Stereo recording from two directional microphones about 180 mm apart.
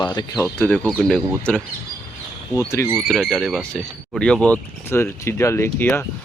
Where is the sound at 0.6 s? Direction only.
10° left (ahead or behind).